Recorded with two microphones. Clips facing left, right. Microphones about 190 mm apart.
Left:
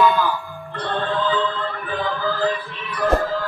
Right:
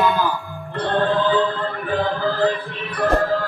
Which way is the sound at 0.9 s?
50° right (ahead or behind).